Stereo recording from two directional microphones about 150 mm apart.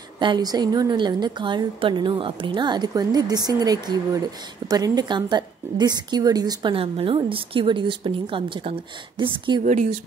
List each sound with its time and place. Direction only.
0.2 s a woman's voice: 30° right (ahead or behind)
9.7 s speech: 55° right (ahead or behind)